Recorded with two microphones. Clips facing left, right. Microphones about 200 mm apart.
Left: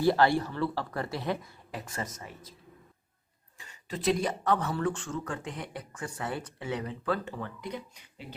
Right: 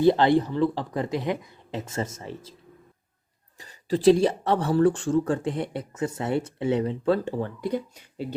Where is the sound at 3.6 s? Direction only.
35° right (ahead or behind).